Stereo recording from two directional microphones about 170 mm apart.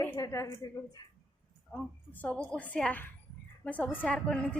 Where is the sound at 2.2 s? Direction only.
10° left (ahead or behind).